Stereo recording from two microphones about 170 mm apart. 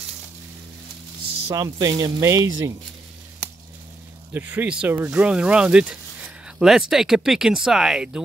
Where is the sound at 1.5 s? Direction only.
20° right (ahead or behind).